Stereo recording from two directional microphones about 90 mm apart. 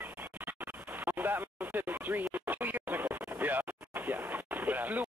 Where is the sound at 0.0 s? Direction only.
20° right (ahead or behind).